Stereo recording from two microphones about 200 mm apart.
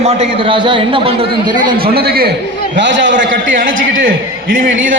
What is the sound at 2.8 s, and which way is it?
Speech, 65° right (ahead or behind).